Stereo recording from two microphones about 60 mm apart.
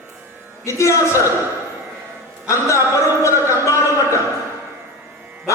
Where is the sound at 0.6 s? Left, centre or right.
Left.